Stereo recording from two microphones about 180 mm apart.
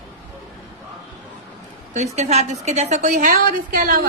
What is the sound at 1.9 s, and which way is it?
A woman's voice, 40° right (ahead or behind).